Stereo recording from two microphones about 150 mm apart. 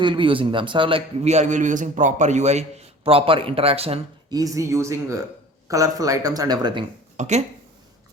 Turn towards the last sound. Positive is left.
turn(degrees=-50)  # may be behind; listen again after turning